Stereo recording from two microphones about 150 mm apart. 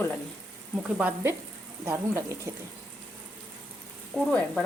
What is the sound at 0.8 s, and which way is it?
Speech, 10° right (ahead or behind).